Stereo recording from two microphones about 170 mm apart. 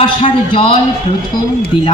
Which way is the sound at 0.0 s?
30° left (ahead or behind).